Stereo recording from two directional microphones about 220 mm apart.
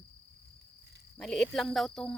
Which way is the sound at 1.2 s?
Centre (ahead or behind).